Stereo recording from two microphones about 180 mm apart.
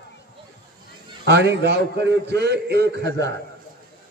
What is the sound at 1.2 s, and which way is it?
A man's voice, 70° right (ahead or behind).